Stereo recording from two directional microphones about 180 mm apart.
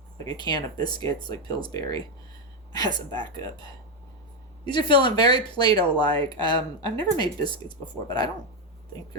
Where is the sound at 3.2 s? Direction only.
25° left (ahead or behind).